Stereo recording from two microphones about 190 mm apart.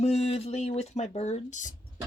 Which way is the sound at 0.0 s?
35° left (ahead or behind).